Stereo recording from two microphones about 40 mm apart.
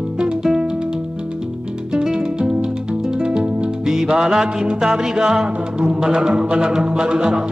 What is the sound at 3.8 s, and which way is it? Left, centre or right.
Music, centre.